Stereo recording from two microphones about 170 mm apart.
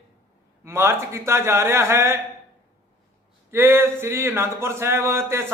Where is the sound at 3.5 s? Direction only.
15° right (ahead or behind).